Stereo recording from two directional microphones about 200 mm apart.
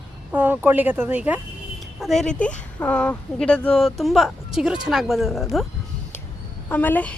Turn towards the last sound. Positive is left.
turn(degrees=10)  # may be behind; listen again after turning